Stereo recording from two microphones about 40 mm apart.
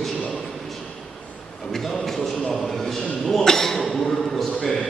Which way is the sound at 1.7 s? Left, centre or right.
Centre.